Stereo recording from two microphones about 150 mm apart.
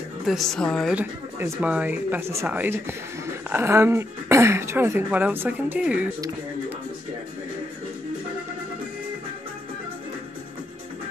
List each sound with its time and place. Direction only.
0.3 s a woman's voice: centre (ahead or behind)
0.9 s speech: 10° right (ahead or behind)